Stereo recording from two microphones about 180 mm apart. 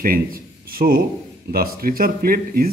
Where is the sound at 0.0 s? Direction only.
55° right (ahead or behind).